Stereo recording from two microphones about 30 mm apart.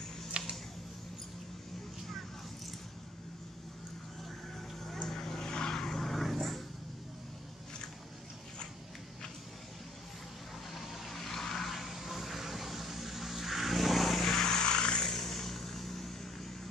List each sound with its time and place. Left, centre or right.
0.3 s a sound: right
5.0 s vehicle: centre
5.9 s vehicle: centre
6.2 s vehicle: centre
10.7 s vehicle: centre
11.1 s vehicle: centre
11.7 s vehicle: centre
14.2 s vehicle: left
15.0 s vehicle: centre